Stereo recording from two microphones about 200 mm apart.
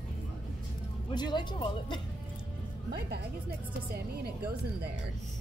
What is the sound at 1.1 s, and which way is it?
Speech, 20° left (ahead or behind).